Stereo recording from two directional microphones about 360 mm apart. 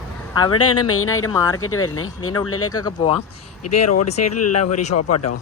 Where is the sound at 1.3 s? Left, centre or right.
Centre.